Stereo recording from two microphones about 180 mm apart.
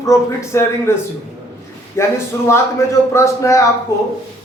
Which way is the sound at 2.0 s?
15° left (ahead or behind).